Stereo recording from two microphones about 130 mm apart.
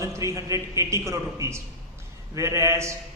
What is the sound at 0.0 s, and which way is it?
A man's voice, 25° right (ahead or behind).